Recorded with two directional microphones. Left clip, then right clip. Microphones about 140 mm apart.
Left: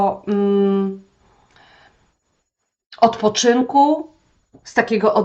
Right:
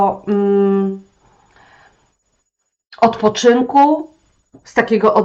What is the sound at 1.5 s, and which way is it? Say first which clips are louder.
Printer: right 2 dB; 30° left (ahead or behind).